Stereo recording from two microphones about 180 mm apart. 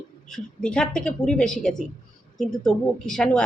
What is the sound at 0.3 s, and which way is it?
A woman's voice, 5° left (ahead or behind).